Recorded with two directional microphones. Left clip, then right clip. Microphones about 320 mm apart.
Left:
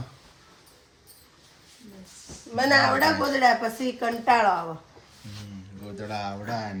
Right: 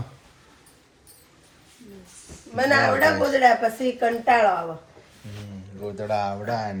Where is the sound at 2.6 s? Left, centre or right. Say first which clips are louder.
Right 1 dB; left.